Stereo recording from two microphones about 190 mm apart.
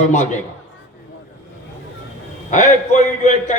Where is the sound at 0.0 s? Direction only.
40° left (ahead or behind).